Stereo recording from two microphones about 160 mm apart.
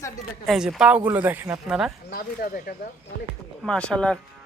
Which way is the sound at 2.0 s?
70° left (ahead or behind).